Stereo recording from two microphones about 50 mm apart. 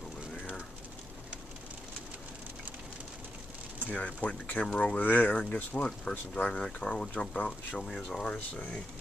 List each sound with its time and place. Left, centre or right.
3.8 s speech: left
5.9 s speech: centre
8.4 s speech: left